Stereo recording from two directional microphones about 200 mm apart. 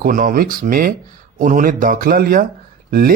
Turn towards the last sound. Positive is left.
turn(degrees=-50)  # may be behind; listen again after turning